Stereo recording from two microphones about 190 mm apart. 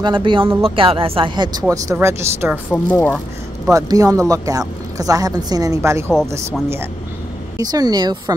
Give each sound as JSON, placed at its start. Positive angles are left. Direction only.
{"t": 0.0, "sound": "a woman's voice", "side_deg": -25}
{"t": 2.7, "sound": "speech", "side_deg": 10}
{"t": 3.7, "sound": "a woman's voice", "side_deg": -20}
{"t": 7.5, "sound": "speech", "side_deg": -20}